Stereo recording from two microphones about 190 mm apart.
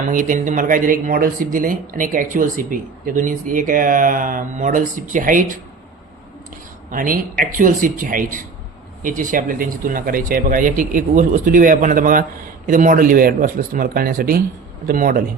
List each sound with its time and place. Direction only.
0.1 s speech: 45° right (ahead or behind)
6.9 s speech: 45° right (ahead or behind)